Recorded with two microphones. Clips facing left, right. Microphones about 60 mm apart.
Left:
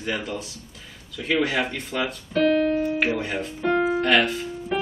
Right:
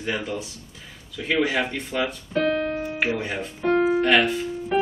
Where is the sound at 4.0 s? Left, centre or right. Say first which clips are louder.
Right 1 dB; centre.